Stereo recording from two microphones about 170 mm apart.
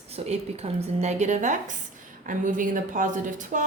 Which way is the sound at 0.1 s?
40° right (ahead or behind).